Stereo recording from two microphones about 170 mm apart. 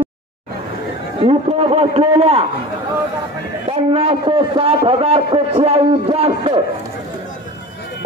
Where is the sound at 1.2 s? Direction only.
35° right (ahead or behind).